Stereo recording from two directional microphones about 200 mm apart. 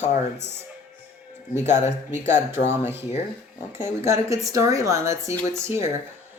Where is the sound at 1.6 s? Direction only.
10° right (ahead or behind).